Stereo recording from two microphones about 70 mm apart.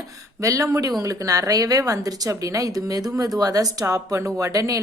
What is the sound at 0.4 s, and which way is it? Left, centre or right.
A woman's voice, right.